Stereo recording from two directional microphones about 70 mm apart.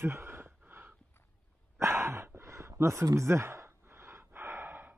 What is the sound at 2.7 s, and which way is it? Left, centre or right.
Gasp, right.